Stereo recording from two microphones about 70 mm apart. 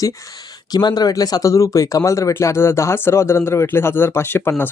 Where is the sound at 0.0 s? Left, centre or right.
Left.